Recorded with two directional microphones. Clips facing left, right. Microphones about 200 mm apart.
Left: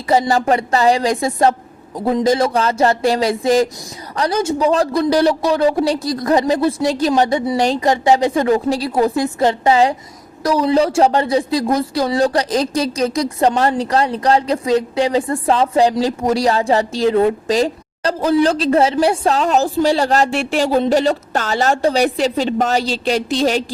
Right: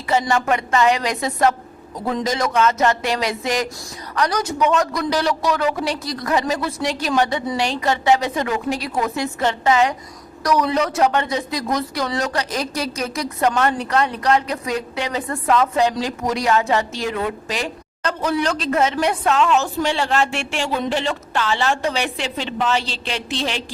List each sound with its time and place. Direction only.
0.1 s a woman's voice: 35° left (ahead or behind)